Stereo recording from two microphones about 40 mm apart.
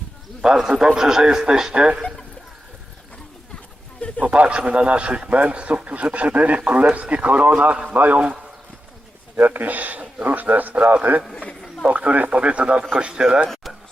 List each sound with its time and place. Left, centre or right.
0.4 s speech: centre
1.7 s speech: right
4.0 s a sound: left
4.4 s a man's voice: right
9.3 s a man's voice: right